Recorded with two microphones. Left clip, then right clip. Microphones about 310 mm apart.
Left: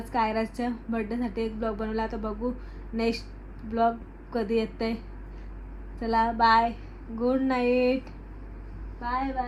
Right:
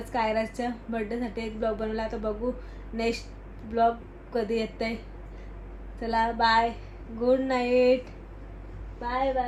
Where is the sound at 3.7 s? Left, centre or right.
Centre.